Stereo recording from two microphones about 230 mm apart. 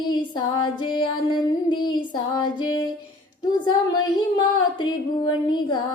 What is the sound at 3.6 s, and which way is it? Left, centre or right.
Female singing, centre.